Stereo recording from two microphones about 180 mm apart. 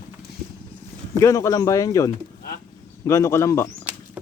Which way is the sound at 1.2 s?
15° left (ahead or behind).